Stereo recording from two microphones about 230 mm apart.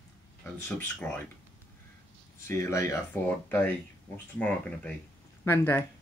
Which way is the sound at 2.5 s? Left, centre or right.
Centre.